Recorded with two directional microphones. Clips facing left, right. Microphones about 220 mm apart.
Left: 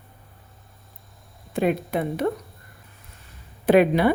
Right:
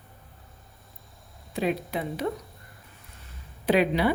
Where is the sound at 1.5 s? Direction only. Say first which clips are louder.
Left 5 dB; 55° left (ahead or behind).